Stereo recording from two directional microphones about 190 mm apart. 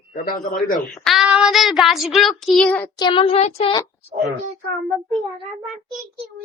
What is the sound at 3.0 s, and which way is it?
Child singing, 25° left (ahead or behind).